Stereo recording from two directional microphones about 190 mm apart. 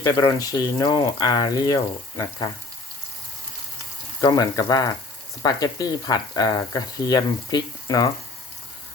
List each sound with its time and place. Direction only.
0.0 s speech: 20° left (ahead or behind)
4.2 s speech: 20° left (ahead or behind)